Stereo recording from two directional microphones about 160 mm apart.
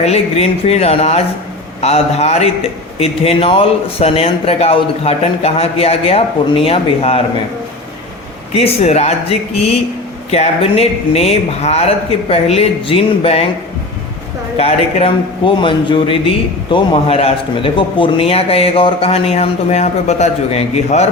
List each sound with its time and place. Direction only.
0.0 s a man's voice: 40° left (ahead or behind)
8.5 s a man's voice: 40° left (ahead or behind)
10.3 s a man's voice: 40° left (ahead or behind)
14.6 s a man's voice: 35° left (ahead or behind)